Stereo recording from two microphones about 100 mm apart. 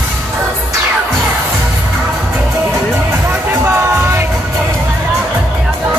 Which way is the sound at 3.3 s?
25° right (ahead or behind).